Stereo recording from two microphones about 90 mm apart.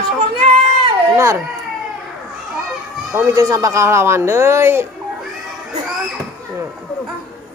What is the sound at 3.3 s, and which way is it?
Speech, 40° right (ahead or behind).